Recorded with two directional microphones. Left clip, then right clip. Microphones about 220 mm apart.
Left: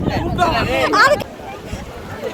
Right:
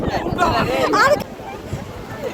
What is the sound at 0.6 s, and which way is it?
Speech, 20° right (ahead or behind).